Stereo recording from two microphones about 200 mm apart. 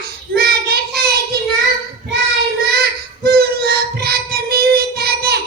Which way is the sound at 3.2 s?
50° right (ahead or behind).